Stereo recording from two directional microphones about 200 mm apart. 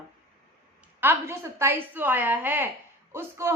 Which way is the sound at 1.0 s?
15° right (ahead or behind).